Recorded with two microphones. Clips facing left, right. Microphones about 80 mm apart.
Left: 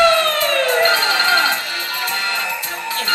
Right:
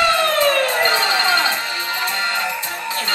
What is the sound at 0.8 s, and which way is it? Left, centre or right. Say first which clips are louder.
Music: left 1 dB; right.